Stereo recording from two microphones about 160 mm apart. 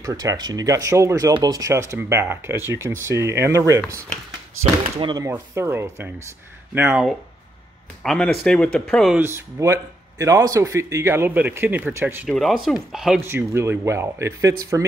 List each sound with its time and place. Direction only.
0.0 s speech: 20° right (ahead or behind)
4.9 s speech: 30° right (ahead or behind)
5.2 s speech: 15° right (ahead or behind); by 9.2 s centre (ahead or behind)
9.2 s speech: 15° right (ahead or behind)
12.3 s speech: centre (ahead or behind)
13.2 s speech: 15° right (ahead or behind)